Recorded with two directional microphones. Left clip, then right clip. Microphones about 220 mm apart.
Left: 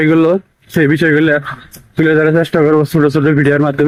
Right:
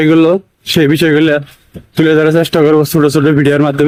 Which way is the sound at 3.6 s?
Centre (ahead or behind).